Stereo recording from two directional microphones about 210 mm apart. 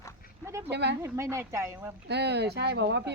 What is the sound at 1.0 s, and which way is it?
Speech, 15° right (ahead or behind).